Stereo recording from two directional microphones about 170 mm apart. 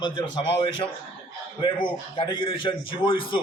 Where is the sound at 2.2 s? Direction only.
30° left (ahead or behind).